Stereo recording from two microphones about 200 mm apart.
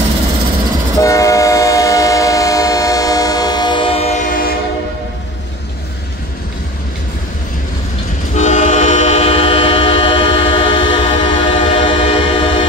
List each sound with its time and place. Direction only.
0.9 s train: 15° left (ahead or behind); by 4.6 s 45° left (ahead or behind)
8.4 s train: 35° left (ahead or behind)